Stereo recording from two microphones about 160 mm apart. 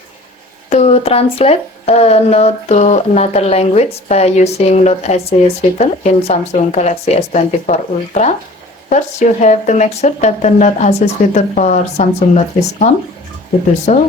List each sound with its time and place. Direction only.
0.7 s speech: 40° left (ahead or behind)